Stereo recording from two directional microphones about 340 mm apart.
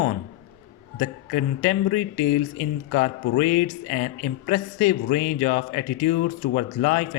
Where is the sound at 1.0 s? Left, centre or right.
Left.